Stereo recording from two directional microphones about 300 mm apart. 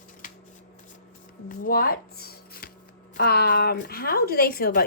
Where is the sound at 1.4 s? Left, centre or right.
Left.